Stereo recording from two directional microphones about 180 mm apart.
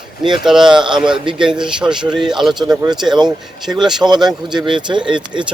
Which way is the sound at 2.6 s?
20° right (ahead or behind).